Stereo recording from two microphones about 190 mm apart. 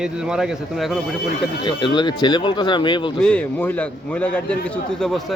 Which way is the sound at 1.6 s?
25° left (ahead or behind).